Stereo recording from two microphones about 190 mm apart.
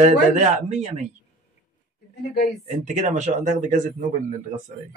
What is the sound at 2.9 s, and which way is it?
Speech, 40° right (ahead or behind).